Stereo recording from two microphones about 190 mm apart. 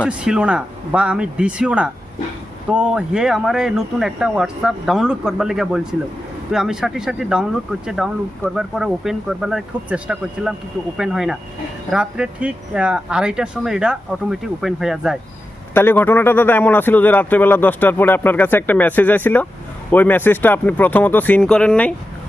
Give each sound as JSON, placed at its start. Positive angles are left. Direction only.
{"t": 0.2, "sound": "speech", "side_deg": -5}
{"t": 15.7, "sound": "speech", "side_deg": 10}